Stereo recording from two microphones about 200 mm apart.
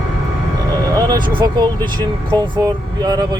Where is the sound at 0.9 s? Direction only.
20° right (ahead or behind).